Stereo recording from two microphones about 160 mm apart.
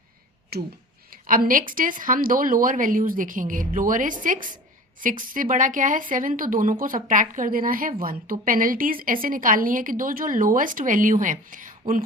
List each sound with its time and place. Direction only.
0.5 s speech: 80° right
1.1 s speech: 60° right (ahead or behind)